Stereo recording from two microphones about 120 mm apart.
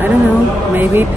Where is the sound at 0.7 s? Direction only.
15° right (ahead or behind).